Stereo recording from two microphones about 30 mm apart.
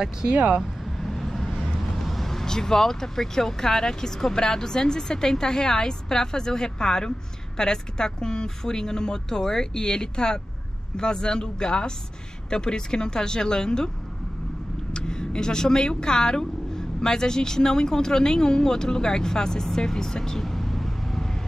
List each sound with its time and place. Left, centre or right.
0.3 s speech: right
0.9 s vehicle: centre
2.4 s speech: left
14.9 s speech: left; by 21.4 s centre